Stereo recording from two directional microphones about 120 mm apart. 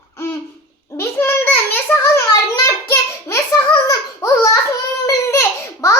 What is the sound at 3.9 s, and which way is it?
Babbling, 25° left (ahead or behind).